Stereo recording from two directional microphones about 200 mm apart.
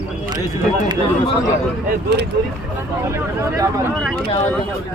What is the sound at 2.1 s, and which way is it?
Speech, 55° right (ahead or behind).